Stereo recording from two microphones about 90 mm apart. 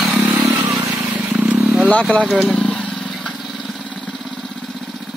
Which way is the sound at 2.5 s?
10° left (ahead or behind).